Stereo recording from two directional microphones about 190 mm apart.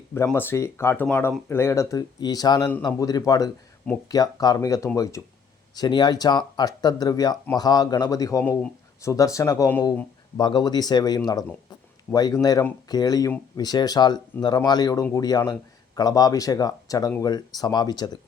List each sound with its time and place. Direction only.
0.1 s speech: 10° left (ahead or behind)
10.3 s speech: 20° left (ahead or behind)